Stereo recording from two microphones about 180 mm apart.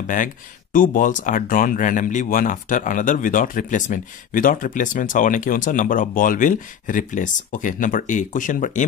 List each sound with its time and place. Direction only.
0.0 s speech: 45° left (ahead or behind)